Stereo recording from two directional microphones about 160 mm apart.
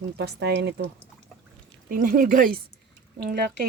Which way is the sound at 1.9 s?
60° right (ahead or behind).